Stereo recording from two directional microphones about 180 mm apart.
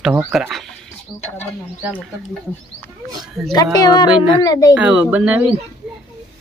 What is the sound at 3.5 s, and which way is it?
Speech, 20° left (ahead or behind).